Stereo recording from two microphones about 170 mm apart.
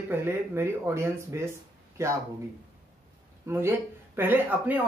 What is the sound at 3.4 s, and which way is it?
Speech, 15° right (ahead or behind).